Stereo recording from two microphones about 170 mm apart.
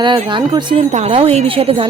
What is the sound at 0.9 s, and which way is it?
Speech, 40° right (ahead or behind).